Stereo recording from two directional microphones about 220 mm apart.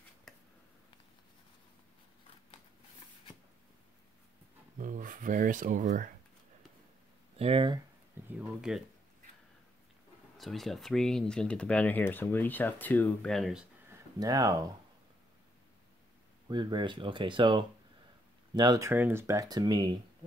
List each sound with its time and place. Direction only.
4.7 s speech: 35° right (ahead or behind)
7.3 s speech: 25° right (ahead or behind)
8.3 s speech: 5° right (ahead or behind)
10.3 s speech: centre (ahead or behind)
14.2 s speech: 15° right (ahead or behind)
16.4 s speech: 20° right (ahead or behind)